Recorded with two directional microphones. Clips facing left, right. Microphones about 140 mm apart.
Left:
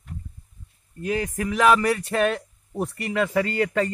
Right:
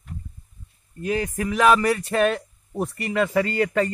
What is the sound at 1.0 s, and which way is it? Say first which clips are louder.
Speech: right 1 dB; 30° right (ahead or behind).